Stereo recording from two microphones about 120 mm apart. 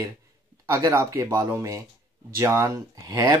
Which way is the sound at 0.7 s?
25° right (ahead or behind).